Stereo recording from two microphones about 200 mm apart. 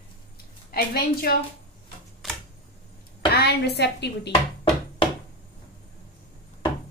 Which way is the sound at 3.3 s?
55° left (ahead or behind).